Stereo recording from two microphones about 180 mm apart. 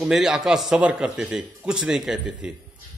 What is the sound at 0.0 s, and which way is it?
Speech, 5° right (ahead or behind).